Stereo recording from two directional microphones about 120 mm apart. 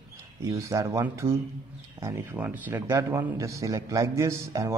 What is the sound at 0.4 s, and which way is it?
A man's voice, 25° right (ahead or behind).